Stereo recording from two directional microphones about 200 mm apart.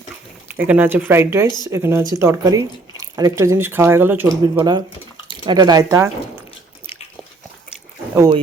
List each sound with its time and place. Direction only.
0.4 s speech: 10° right (ahead or behind)
1.5 s speech: 20° left (ahead or behind)
1.7 s speech: 15° right (ahead or behind)